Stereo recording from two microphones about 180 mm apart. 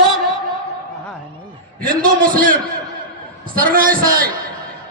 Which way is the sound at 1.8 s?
55° right (ahead or behind).